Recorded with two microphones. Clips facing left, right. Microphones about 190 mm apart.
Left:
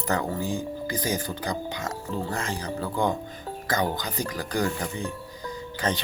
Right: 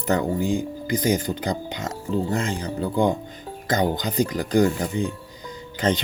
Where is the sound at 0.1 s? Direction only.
20° right (ahead or behind).